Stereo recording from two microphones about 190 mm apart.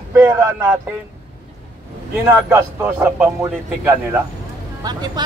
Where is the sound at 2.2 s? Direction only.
10° right (ahead or behind).